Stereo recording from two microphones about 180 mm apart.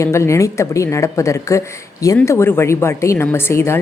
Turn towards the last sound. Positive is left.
turn(degrees=15)  # may be behind; listen again after turning